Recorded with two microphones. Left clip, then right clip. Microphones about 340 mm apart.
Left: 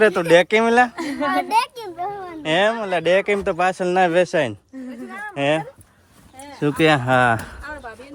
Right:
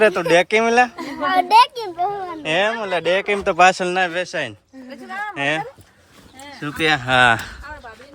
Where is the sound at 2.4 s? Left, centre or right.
Centre.